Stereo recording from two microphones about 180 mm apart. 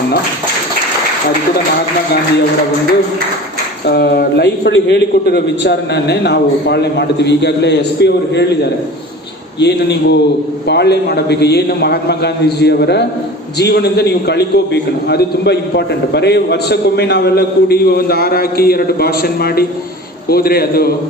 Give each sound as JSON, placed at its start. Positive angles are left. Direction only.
{"t": 3.8, "sound": "a man's voice", "side_deg": 65}
{"t": 9.6, "sound": "a man's voice", "side_deg": 70}